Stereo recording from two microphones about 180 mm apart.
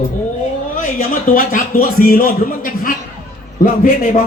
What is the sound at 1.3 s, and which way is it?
A man's voice, 50° left (ahead or behind).